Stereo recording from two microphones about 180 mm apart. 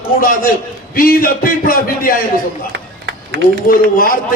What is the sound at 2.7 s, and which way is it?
Run, 65° right (ahead or behind).